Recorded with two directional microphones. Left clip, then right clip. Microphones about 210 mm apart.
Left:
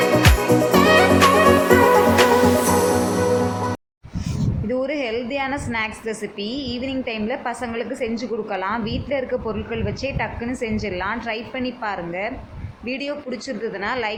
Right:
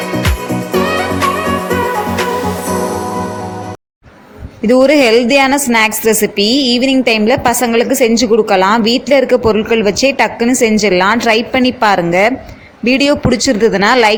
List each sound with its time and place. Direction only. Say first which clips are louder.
0.7 s music: right 4 dB; centre (ahead or behind)
4.7 s a woman's voice: right 16 dB; 45° right (ahead or behind)